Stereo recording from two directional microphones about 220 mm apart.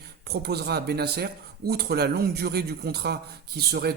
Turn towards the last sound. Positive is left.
turn(degrees=-45)  # may be behind; listen again after turning